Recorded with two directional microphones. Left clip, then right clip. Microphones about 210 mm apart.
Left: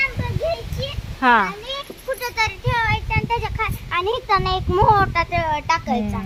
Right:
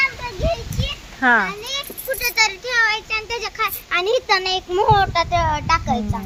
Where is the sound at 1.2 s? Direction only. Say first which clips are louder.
Even; 5° left (ahead or behind).